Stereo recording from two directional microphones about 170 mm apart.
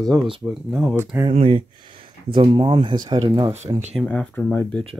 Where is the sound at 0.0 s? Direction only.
Centre (ahead or behind).